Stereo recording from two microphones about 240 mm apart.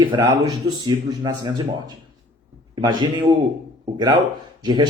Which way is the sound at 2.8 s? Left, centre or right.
Centre.